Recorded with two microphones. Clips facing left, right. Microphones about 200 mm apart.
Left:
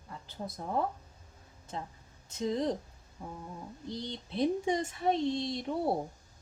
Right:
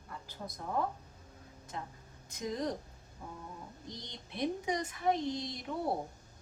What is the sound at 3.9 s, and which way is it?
Speech, 30° left (ahead or behind).